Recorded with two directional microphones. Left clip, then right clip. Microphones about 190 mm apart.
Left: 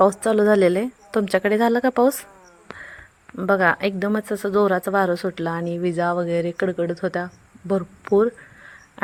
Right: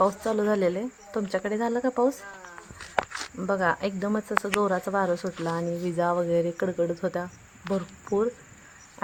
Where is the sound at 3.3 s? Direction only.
20° left (ahead or behind).